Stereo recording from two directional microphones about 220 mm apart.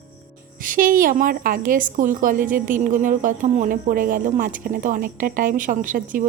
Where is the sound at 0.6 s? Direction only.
40° right (ahead or behind).